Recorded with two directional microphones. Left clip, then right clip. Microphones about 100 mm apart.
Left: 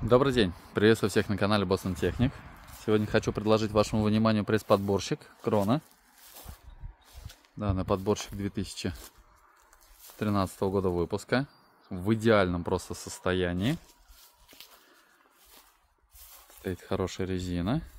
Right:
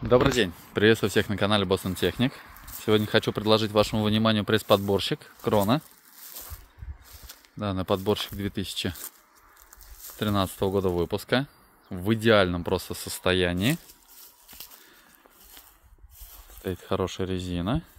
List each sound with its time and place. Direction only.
0.1 s speech: 5° left (ahead or behind); by 2.4 s 15° right (ahead or behind)
2.8 s speech: centre (ahead or behind)
5.5 s speech: 10° right (ahead or behind)
7.5 s speech: 5° right (ahead or behind)
10.1 s speech: 5° right (ahead or behind)
13.2 s speech: 20° right (ahead or behind)
16.6 s speech: 5° left (ahead or behind)